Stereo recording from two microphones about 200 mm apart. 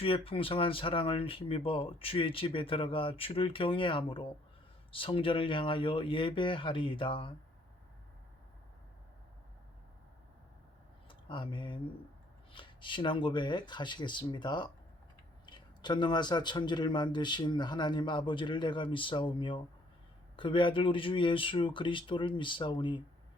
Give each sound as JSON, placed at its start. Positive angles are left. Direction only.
{"t": 0.0, "sound": "speech", "side_deg": 25}
{"t": 11.1, "sound": "speech", "side_deg": 25}